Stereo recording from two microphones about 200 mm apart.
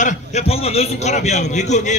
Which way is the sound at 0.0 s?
35° left (ahead or behind).